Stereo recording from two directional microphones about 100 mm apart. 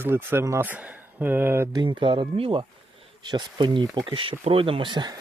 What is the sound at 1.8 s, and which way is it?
Speech, 55° right (ahead or behind).